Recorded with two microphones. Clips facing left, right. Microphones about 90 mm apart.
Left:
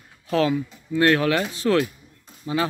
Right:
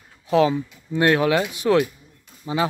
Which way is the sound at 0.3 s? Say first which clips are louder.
Right 3 dB; 20° right (ahead or behind).